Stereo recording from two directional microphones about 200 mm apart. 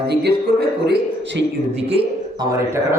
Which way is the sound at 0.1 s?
55° right (ahead or behind).